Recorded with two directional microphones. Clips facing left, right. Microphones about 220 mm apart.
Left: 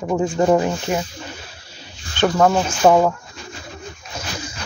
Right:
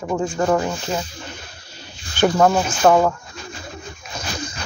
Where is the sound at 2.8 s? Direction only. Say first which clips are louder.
Left 1 dB; 10° left (ahead or behind).